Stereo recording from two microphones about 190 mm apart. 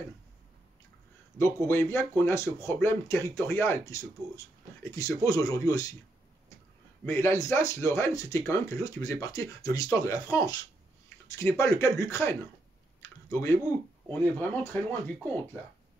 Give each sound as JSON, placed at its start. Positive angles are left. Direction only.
{"t": 1.4, "sound": "speech", "side_deg": 15}
{"t": 7.1, "sound": "speech", "side_deg": 15}
{"t": 13.0, "sound": "a sound", "side_deg": 15}
{"t": 14.1, "sound": "speech", "side_deg": 10}